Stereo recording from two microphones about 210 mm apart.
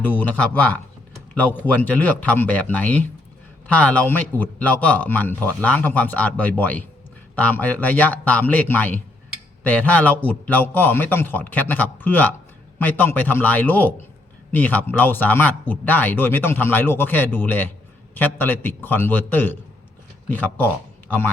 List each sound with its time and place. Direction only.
0.0 s speech: 10° left (ahead or behind)